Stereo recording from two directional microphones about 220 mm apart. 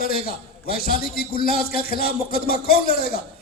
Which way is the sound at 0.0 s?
40° left (ahead or behind).